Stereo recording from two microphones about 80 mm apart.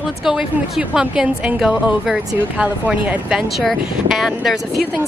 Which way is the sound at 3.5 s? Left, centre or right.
Centre.